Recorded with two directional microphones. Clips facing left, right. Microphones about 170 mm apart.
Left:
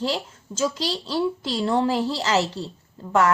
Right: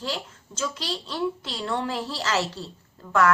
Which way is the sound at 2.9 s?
25° left (ahead or behind).